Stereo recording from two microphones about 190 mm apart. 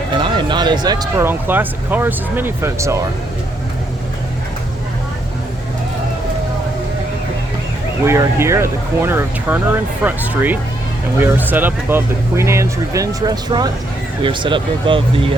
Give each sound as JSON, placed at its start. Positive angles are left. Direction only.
{"t": 0.1, "sound": "speech", "side_deg": -25}
{"t": 8.0, "sound": "speech", "side_deg": -15}